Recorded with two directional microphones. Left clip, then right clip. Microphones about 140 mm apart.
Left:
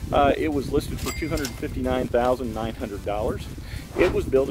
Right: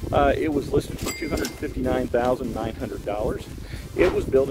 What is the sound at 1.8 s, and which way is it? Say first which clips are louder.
Speech: even; 25° left (ahead or behind).